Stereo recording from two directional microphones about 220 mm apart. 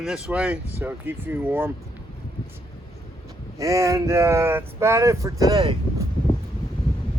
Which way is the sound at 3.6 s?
15° right (ahead or behind).